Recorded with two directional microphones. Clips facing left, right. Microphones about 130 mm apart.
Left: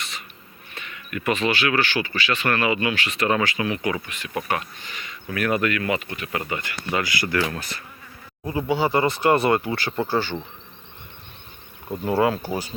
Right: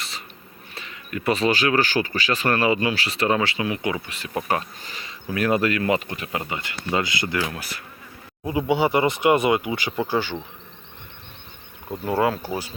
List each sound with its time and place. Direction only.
0.7 s speech: 30° right (ahead or behind)
6.3 s speech: 20° right (ahead or behind)
7.5 s speech: 5° right (ahead or behind)
8.4 s speech: 20° right (ahead or behind)
11.9 s speech: 15° left (ahead or behind)
12.2 s speech: centre (ahead or behind)